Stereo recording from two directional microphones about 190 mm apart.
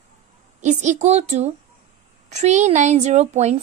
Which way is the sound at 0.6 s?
40° right (ahead or behind).